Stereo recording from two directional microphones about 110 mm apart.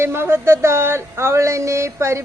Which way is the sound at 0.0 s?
20° right (ahead or behind).